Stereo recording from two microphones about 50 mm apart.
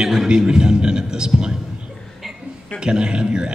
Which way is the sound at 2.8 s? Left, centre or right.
Centre.